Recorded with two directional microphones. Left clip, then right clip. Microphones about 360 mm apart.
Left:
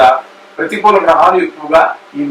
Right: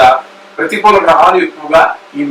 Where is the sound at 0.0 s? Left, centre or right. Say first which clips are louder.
Right 1 dB; centre.